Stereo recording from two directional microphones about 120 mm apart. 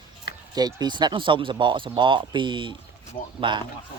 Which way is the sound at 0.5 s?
35° right (ahead or behind).